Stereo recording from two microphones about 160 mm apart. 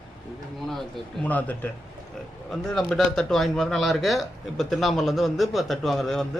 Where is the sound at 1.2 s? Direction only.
10° left (ahead or behind).